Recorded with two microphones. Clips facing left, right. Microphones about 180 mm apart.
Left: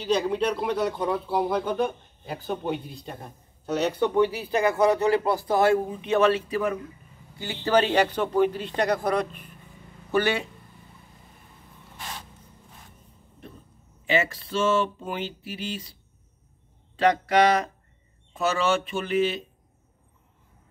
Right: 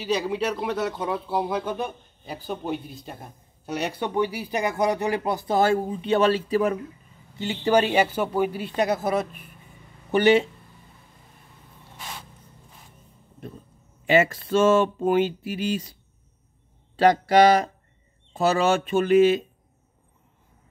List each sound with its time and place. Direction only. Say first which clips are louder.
0.0 s speech: left 1 dB; 5° right (ahead or behind); by 6.8 s 35° right (ahead or behind)
7.3 s speech: right 2 dB; 15° right (ahead or behind)
10.1 s speech: right 6 dB; 20° right (ahead or behind)
14.1 s speech: right 6 dB; 45° right (ahead or behind)
16.9 s speech: right 3 dB; 35° right (ahead or behind)